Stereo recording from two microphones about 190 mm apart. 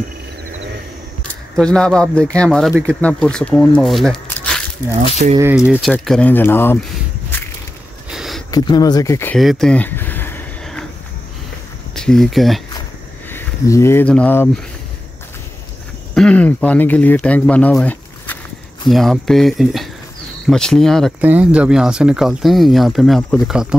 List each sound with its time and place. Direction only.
1.6 s speech: 5° left (ahead or behind)
5.2 s speech: 45° right (ahead or behind)
5.7 s speech: centre (ahead or behind)
8.1 s a sound: centre (ahead or behind)
8.5 s speech: 20° left (ahead or behind)
9.4 s a sound: centre (ahead or behind)
11.9 s speech: 5° left (ahead or behind)
13.3 s speech: 15° left (ahead or behind)
16.2 s speech: 5° left (ahead or behind)